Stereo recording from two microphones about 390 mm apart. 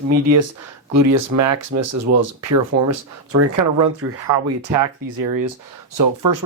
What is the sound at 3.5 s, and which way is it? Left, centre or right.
Speech, right.